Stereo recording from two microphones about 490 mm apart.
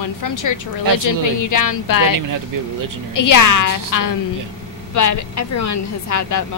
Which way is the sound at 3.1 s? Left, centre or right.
Left.